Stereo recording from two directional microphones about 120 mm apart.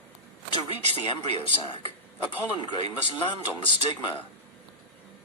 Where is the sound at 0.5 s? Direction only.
50° left (ahead or behind).